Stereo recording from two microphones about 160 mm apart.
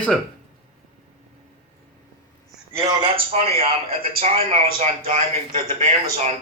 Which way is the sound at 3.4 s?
40° right (ahead or behind).